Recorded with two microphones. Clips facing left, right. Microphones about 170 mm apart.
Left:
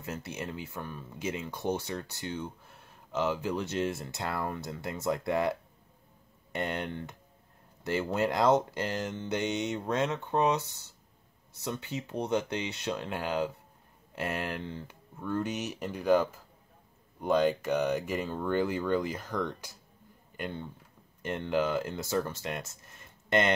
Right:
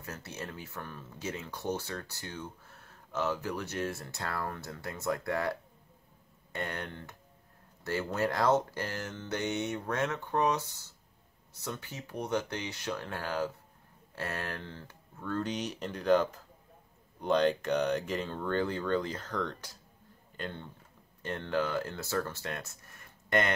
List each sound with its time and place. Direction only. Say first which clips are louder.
0.0 s speech: left 4 dB; 15° left (ahead or behind)